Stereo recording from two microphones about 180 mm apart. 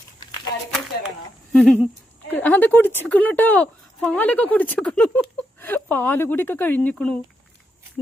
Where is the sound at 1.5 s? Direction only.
5° left (ahead or behind).